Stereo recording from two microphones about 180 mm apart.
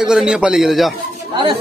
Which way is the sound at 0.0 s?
5° right (ahead or behind).